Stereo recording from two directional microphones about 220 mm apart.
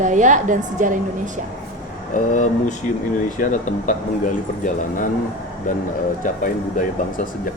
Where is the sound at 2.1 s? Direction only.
35° left (ahead or behind).